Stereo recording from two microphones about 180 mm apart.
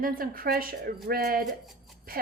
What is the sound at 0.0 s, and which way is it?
Speech, 55° right (ahead or behind).